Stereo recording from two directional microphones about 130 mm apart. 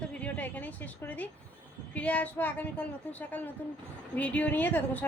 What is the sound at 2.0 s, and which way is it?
Speech, 10° left (ahead or behind).